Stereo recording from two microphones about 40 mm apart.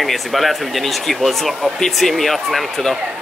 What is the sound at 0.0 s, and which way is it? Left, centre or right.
Speech, centre.